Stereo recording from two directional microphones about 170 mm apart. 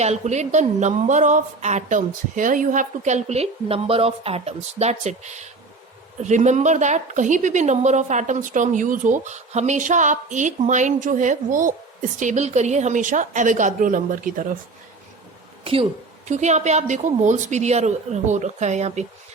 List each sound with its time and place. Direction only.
0.0 s a woman's voice: 40° right (ahead or behind)
15.6 s a woman's voice: 35° right (ahead or behind)